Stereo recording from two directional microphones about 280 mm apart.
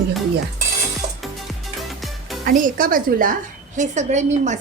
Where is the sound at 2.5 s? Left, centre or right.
Right.